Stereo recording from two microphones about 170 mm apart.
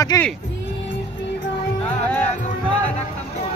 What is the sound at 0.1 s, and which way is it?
Speech, 20° left (ahead or behind).